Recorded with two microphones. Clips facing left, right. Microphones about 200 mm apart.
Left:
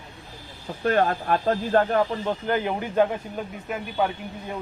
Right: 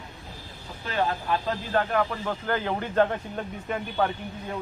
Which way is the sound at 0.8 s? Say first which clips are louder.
Left 6 dB; 55° left (ahead or behind).